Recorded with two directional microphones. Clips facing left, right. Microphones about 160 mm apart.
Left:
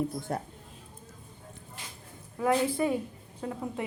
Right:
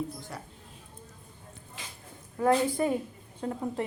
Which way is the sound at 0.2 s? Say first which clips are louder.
Left 8 dB; 55° left (ahead or behind).